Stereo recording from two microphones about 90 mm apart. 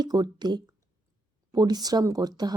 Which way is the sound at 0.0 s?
50° right (ahead or behind).